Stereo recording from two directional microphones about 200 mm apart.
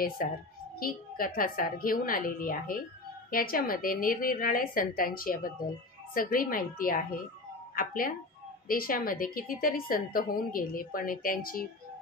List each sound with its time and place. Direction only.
0.2 s a woman's voice: 45° left (ahead or behind)